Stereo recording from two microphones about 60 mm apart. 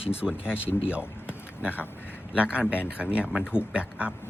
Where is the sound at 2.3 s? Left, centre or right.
Centre.